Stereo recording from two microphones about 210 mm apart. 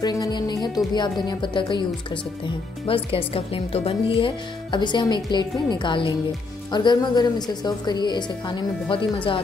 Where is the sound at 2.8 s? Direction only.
25° left (ahead or behind).